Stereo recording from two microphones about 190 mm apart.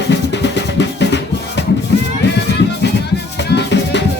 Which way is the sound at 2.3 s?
65° left (ahead or behind).